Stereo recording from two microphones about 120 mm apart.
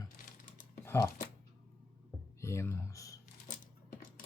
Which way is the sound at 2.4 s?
25° left (ahead or behind).